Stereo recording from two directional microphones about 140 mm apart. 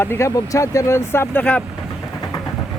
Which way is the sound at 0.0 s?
20° left (ahead or behind).